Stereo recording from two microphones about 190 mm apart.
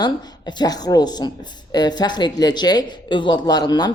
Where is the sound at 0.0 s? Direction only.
20° left (ahead or behind).